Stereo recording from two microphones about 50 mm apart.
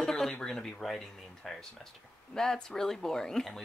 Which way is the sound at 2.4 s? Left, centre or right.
Centre.